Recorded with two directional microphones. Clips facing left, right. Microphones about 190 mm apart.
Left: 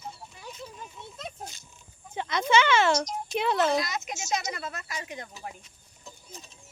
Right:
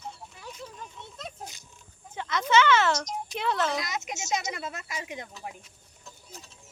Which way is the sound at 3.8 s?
25° right (ahead or behind).